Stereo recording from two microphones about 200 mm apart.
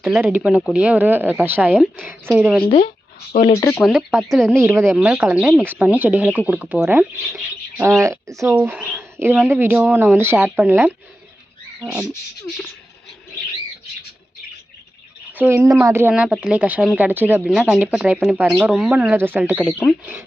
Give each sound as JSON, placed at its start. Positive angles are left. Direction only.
{"t": 0.0, "sound": "speech", "side_deg": -5}
{"t": 2.6, "sound": "speech", "side_deg": 25}
{"t": 3.8, "sound": "speech", "side_deg": 0}
{"t": 4.5, "sound": "speech", "side_deg": -15}
{"t": 15.3, "sound": "speech", "side_deg": -10}